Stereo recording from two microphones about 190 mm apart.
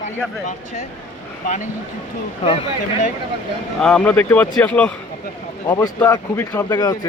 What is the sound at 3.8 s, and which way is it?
A man's voice, 5° left (ahead or behind).